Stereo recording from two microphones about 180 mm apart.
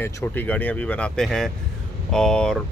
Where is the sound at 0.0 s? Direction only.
10° left (ahead or behind).